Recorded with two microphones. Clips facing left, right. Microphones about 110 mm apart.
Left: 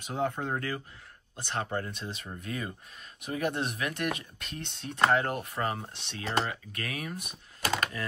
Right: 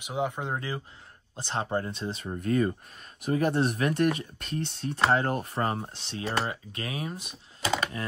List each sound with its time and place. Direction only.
0.0 s speech: 10° right (ahead or behind)
1.3 s speech: 30° right (ahead or behind)